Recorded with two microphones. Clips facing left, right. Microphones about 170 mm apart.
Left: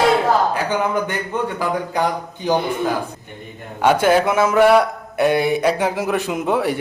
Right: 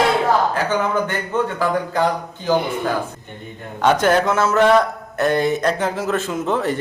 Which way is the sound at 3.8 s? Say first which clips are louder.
Left 1 dB; 10° left (ahead or behind).